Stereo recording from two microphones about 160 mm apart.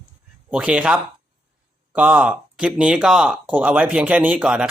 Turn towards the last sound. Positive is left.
turn(degrees=-5)  # may be behind; listen again after turning